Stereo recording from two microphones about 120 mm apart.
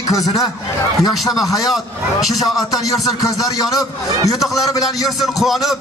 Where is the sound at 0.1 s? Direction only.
30° left (ahead or behind).